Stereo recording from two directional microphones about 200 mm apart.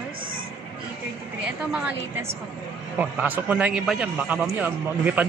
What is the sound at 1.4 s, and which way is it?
A woman's voice, 5° right (ahead or behind).